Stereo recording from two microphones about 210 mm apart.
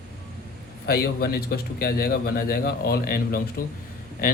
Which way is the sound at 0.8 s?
45° left (ahead or behind).